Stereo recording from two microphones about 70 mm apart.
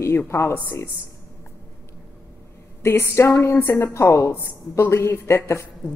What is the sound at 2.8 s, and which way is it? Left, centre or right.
A woman's voice, left.